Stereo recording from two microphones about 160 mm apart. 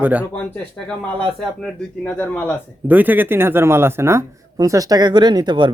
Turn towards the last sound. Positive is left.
turn(degrees=-30)  # may be behind; listen again after turning